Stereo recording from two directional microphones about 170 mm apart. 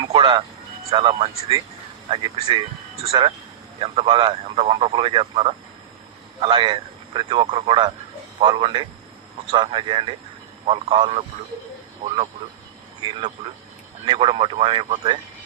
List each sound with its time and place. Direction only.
0.0 s vehicle: 30° right (ahead or behind)
0.9 s speech: 35° right (ahead or behind)
14.0 s speech: 30° right (ahead or behind)